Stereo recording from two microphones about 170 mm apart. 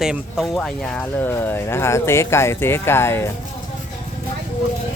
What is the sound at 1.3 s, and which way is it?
Speech, 15° left (ahead or behind).